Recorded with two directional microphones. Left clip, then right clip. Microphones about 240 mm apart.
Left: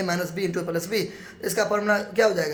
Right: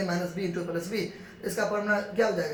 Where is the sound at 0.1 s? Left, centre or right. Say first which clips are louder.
Left 5 dB; left.